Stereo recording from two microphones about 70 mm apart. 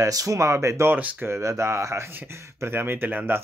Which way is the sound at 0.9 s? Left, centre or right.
Right.